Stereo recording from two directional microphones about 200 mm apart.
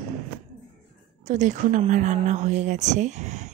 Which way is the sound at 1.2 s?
35° right (ahead or behind).